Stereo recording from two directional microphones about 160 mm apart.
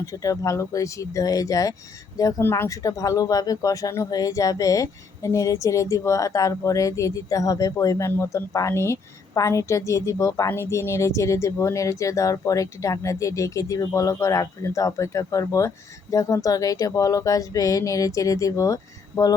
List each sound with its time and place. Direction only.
0.0 s speech: 20° left (ahead or behind)